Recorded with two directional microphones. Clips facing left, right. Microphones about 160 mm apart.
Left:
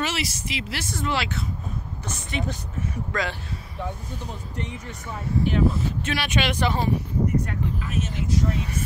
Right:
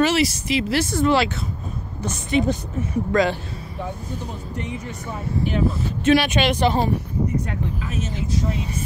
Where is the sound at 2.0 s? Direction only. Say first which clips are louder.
Right 11 dB; 20° right (ahead or behind).